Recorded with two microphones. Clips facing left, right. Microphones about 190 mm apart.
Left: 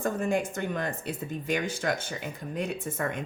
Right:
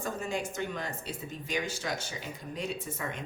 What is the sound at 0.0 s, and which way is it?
A woman's voice, 55° left (ahead or behind).